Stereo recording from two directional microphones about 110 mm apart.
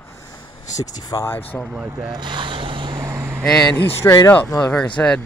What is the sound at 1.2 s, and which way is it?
Speech, 20° left (ahead or behind).